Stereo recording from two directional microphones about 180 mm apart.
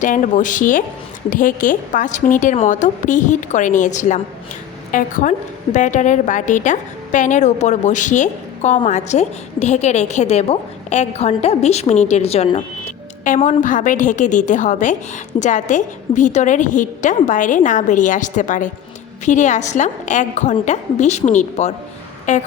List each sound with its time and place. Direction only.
0.0 s a woman's voice: 45° left (ahead or behind)
12.8 s a woman's voice: 45° left (ahead or behind)